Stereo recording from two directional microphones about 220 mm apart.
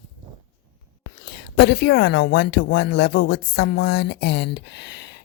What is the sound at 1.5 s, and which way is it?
Speech, 50° left (ahead or behind).